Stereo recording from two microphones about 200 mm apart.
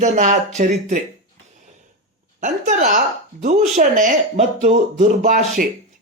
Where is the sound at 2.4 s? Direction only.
40° right (ahead or behind).